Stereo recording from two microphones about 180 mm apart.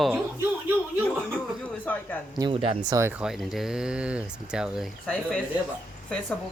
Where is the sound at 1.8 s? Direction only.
10° left (ahead or behind).